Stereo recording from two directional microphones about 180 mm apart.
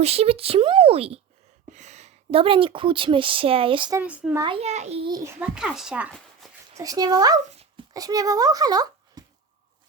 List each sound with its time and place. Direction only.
0.0 s a woman's voice: 35° right (ahead or behind)
3.9 s speech: 5° right (ahead or behind)
4.4 s speech: 30° right (ahead or behind)
5.4 s speech: 5° right (ahead or behind)
6.7 s a child's voice: 20° right (ahead or behind)